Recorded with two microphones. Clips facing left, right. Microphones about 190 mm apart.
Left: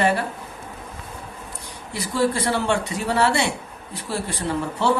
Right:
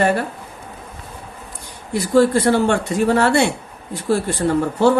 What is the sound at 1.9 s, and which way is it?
Speech, 50° right (ahead or behind).